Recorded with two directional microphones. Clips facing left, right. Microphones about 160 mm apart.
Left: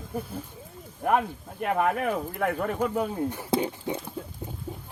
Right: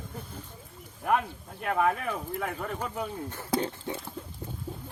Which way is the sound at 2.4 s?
65° left (ahead or behind).